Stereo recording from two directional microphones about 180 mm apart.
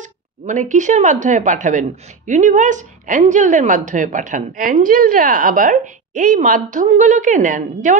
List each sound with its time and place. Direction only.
0.0 s speech: 45° right (ahead or behind)